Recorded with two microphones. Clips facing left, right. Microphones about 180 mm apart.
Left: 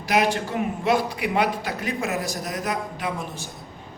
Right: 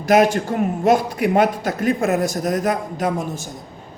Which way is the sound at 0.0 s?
45° right (ahead or behind).